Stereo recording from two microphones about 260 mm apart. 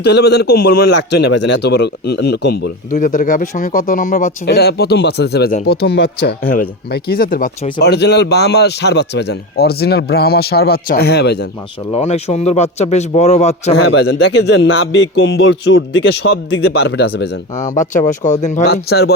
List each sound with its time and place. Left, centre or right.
0.0 s speech: left
11.9 s speech: left
14.1 s speech: left